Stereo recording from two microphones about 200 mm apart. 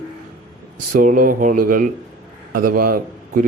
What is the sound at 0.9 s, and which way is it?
Speech, 45° right (ahead or behind).